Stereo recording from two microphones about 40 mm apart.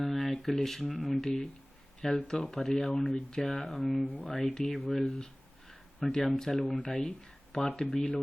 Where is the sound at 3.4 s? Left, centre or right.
Centre.